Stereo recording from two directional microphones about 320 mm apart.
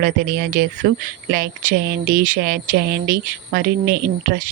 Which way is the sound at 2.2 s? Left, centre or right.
Right.